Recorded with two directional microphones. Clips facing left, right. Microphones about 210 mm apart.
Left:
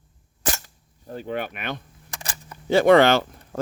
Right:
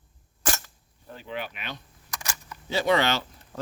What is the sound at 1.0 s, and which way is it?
Speech, 45° left (ahead or behind).